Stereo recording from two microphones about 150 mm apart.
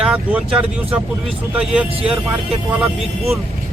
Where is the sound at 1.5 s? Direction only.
10° right (ahead or behind).